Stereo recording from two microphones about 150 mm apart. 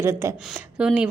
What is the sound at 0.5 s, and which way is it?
Speech, 5° right (ahead or behind).